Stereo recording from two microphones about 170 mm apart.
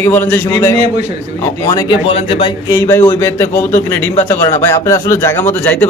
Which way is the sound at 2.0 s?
35° left (ahead or behind).